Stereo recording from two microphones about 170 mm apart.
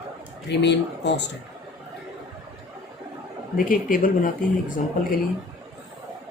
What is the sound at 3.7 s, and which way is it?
Speech, 55° left (ahead or behind).